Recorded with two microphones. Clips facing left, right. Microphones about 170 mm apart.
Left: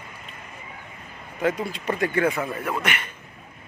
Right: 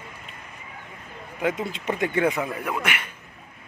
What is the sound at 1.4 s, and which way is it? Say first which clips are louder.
Speech: left 1 dB; 15° right (ahead or behind).